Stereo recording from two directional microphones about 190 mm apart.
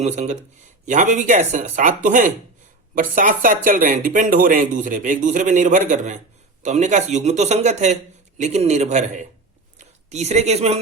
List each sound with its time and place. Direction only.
0.0 s a man's voice: 35° right (ahead or behind)